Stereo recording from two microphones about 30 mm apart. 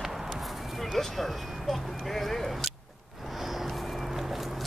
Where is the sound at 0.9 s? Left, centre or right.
Centre.